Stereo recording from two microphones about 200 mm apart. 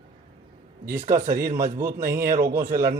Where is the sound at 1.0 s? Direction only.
40° right (ahead or behind).